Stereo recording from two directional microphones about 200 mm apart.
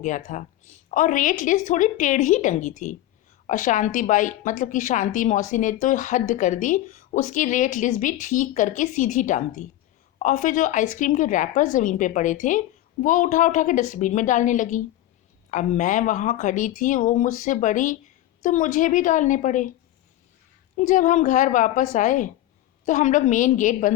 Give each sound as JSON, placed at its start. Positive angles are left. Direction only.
{"t": 0.3, "sound": "a woman's voice", "side_deg": 35}
{"t": 20.7, "sound": "a woman's voice", "side_deg": 40}